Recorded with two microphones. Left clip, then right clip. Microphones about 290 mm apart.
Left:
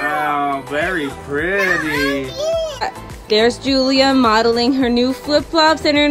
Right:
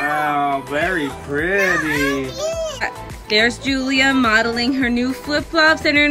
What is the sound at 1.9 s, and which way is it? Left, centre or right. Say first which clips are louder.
Speech: left 1 dB; left.